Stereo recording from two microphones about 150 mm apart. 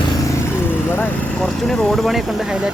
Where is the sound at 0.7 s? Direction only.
15° left (ahead or behind).